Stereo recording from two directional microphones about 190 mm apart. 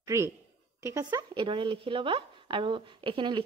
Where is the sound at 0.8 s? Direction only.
20° right (ahead or behind).